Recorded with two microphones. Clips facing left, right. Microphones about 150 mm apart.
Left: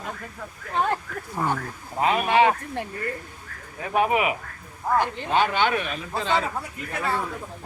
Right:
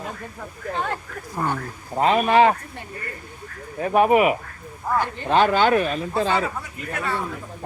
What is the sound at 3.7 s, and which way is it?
Speech, 40° right (ahead or behind).